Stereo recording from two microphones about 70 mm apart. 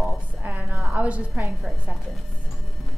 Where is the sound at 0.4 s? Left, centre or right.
Right.